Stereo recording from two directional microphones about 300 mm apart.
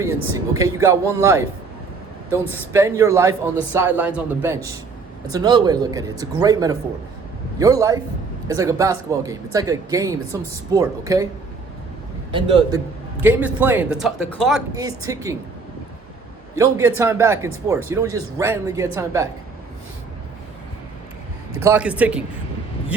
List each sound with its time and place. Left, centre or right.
0.0 s speech: centre
2.5 s speech: centre
12.3 s speech: centre
13.2 s speech: centre
14.8 s speech: centre
16.6 s speech: centre
21.6 s speech: centre